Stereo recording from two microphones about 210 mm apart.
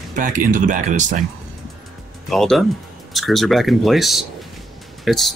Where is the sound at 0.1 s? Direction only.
40° right (ahead or behind).